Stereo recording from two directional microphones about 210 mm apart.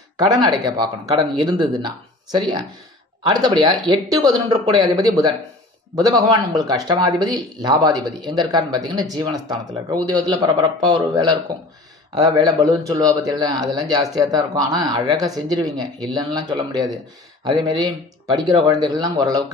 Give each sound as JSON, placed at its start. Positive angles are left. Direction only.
{"t": 0.3, "sound": "a man's voice", "side_deg": -15}